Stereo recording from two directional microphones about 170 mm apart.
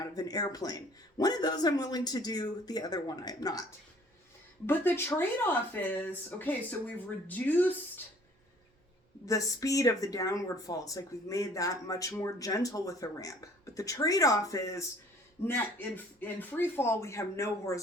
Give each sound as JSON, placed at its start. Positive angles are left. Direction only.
{"t": 0.0, "sound": "speech", "side_deg": 20}
{"t": 4.6, "sound": "speech", "side_deg": 15}
{"t": 9.2, "sound": "speech", "side_deg": 20}